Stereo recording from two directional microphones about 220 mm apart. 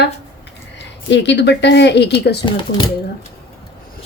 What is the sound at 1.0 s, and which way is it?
A woman's voice, 55° left (ahead or behind).